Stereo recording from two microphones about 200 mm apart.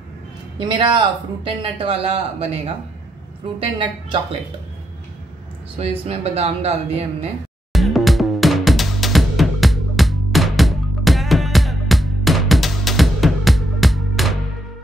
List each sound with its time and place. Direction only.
0.6 s speech: 25° right (ahead or behind)
5.8 s speech: 30° right (ahead or behind)
7.7 s music: centre (ahead or behind)